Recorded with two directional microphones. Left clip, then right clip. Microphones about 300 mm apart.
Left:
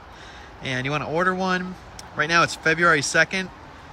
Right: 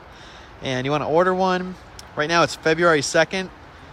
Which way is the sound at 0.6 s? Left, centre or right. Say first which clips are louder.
Right 3 dB; centre.